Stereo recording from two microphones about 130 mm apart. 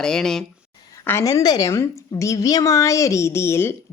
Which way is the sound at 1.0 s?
25° left (ahead or behind).